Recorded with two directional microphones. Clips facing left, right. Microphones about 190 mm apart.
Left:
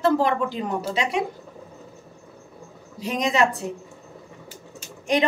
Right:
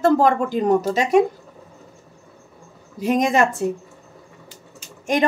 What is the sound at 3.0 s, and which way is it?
Speech, 50° right (ahead or behind).